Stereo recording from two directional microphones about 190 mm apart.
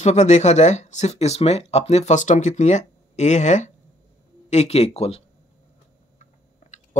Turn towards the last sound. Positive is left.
turn(degrees=40)  # may be behind; listen again after turning